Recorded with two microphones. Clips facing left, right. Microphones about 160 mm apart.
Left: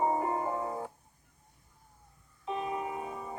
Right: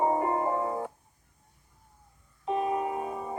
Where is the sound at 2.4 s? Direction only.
45° right (ahead or behind).